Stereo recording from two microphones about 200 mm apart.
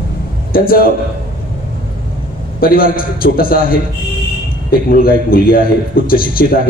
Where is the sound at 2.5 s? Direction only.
45° left (ahead or behind).